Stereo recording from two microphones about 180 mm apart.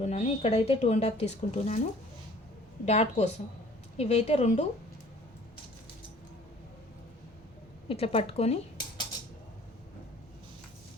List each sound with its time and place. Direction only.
0.0 s speech: 40° left (ahead or behind)
2.8 s speech: 35° left (ahead or behind)
7.9 s speech: 30° left (ahead or behind)